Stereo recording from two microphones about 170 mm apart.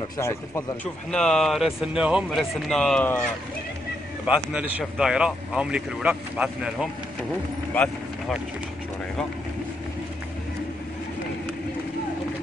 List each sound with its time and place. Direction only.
0.2 s speech: 15° left (ahead or behind)
1.1 s speech: 5° left (ahead or behind)
4.3 s speech: 10° right (ahead or behind)